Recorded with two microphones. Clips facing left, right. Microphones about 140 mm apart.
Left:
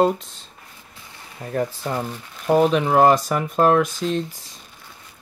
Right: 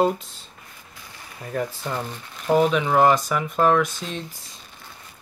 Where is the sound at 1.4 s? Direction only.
35° left (ahead or behind).